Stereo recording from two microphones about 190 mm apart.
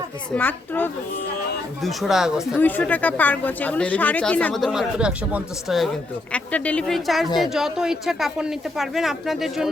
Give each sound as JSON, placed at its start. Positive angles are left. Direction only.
{"t": 0.3, "sound": "speech", "side_deg": 10}
{"t": 2.6, "sound": "speech", "side_deg": 10}